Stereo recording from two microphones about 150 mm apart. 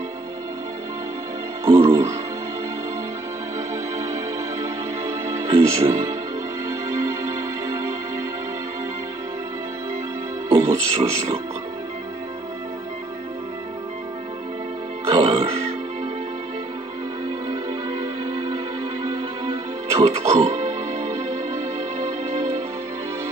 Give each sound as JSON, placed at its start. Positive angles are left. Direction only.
{"t": 1.7, "sound": "music", "side_deg": -20}
{"t": 5.5, "sound": "speech", "side_deg": -40}
{"t": 10.5, "sound": "speech", "side_deg": -45}
{"t": 15.0, "sound": "music", "side_deg": -40}
{"t": 18.2, "sound": "music", "side_deg": -40}